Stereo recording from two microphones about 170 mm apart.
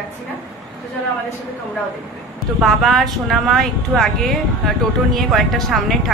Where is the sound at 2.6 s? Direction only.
Centre (ahead or behind).